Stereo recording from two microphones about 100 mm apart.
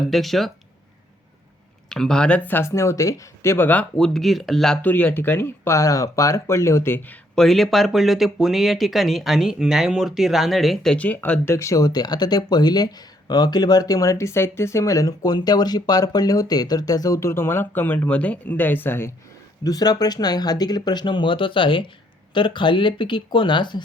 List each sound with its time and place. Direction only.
0.0 s speech: centre (ahead or behind)
1.9 s speech: 5° left (ahead or behind)
3.9 s speech: 5° left (ahead or behind)
4.8 s speech: 20° left (ahead or behind)
7.3 s speech: centre (ahead or behind)
10.9 s speech: 15° left (ahead or behind)
19.6 s speech: 40° left (ahead or behind)